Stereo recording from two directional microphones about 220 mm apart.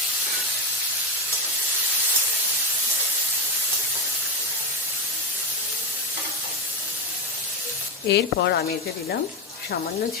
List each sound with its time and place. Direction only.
8.0 s speech: 50° left (ahead or behind)